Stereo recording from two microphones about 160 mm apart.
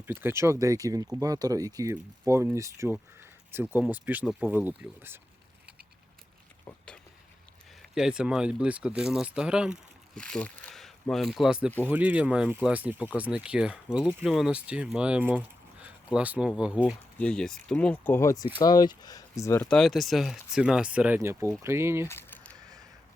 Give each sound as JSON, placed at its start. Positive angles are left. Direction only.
{"t": 0.0, "sound": "speech", "side_deg": -15}
{"t": 6.7, "sound": "a sound", "side_deg": 10}
{"t": 7.8, "sound": "speech", "side_deg": -5}
{"t": 10.2, "sound": "speech", "side_deg": 5}
{"t": 17.2, "sound": "speech", "side_deg": 5}
{"t": 22.0, "sound": "a sound", "side_deg": 15}